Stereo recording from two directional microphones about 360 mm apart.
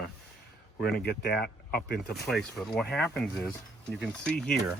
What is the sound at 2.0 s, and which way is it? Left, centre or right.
Speech, centre.